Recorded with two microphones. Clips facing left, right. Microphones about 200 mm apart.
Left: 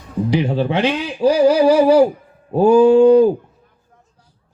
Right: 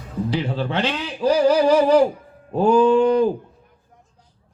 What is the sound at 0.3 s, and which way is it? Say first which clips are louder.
Speech: left 7 dB; 15° left (ahead or behind).